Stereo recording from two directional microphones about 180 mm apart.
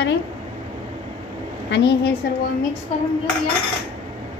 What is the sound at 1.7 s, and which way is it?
Speech, 75° left (ahead or behind).